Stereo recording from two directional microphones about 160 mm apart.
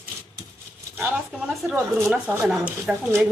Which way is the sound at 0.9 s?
Centre (ahead or behind).